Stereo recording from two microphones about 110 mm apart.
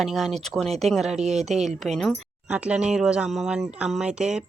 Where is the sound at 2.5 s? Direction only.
10° right (ahead or behind).